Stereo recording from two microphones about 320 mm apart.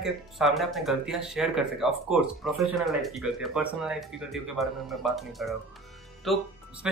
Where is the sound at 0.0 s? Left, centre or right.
Centre.